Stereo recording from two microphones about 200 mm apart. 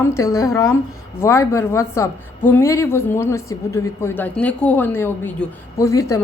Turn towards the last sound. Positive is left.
turn(degrees=15)  # may be behind; listen again after turning